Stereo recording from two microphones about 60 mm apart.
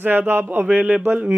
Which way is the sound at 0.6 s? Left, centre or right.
Centre.